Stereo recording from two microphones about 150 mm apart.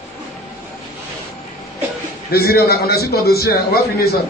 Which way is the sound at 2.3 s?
90° left.